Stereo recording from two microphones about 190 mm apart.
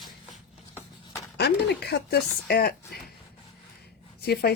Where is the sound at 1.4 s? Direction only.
60° left (ahead or behind).